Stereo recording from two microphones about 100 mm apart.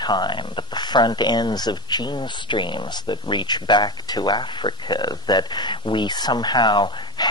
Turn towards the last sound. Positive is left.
turn(degrees=50)  # may be behind; listen again after turning